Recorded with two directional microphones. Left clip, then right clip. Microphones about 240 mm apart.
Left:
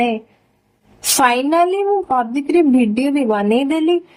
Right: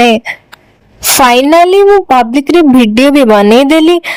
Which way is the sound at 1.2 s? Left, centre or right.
Right.